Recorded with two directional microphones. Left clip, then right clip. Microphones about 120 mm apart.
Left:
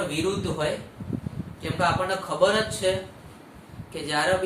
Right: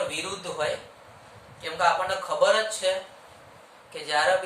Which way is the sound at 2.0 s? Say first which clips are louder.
Even; 15° right (ahead or behind).